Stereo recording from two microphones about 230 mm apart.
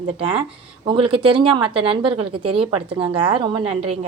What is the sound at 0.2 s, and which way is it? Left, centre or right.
A woman's voice, right.